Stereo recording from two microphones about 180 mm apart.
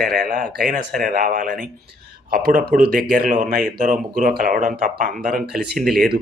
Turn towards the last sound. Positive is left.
turn(degrees=0)  # may be behind; listen again after turning